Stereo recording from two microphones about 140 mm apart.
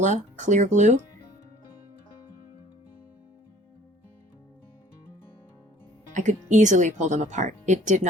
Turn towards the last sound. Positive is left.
turn(degrees=-60)  # may be behind; listen again after turning